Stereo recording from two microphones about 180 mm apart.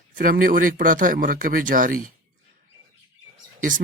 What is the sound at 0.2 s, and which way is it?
Speech, 50° right (ahead or behind).